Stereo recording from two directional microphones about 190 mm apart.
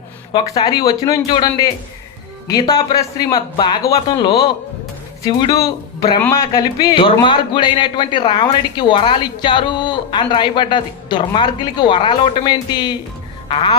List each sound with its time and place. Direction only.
0.3 s a man's voice: 20° left (ahead or behind)